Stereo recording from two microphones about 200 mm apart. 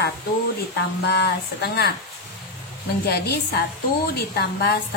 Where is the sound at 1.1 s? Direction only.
55° left (ahead or behind).